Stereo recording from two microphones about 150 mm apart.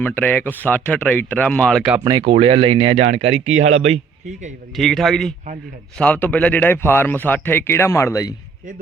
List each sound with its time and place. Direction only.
0.0 s speech: 10° left (ahead or behind)
2.0 s speech: 25° right (ahead or behind)
2.3 s speech: 35° right (ahead or behind)
4.8 s a man's voice: centre (ahead or behind); by 8.3 s 20° left (ahead or behind)